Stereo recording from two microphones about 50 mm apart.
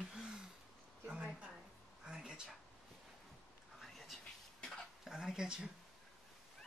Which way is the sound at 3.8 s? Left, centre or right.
Centre.